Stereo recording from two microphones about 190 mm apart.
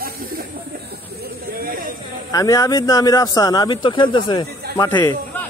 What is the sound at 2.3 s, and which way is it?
Speech, 15° left (ahead or behind).